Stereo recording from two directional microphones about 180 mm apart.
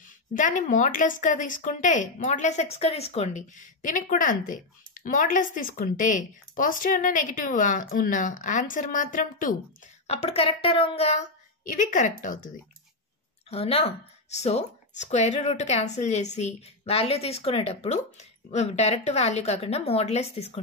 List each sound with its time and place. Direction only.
0.0 s a woman's voice: 45° left (ahead or behind)
10.0 s speech: 35° left (ahead or behind)
13.5 s speech: 35° left (ahead or behind)